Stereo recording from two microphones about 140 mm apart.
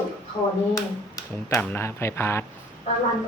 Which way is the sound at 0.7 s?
25° left (ahead or behind).